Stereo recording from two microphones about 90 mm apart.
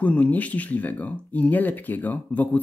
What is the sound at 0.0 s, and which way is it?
Speech, 15° left (ahead or behind).